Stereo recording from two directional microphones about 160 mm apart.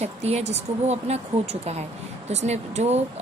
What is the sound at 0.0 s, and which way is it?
Speech, 40° right (ahead or behind).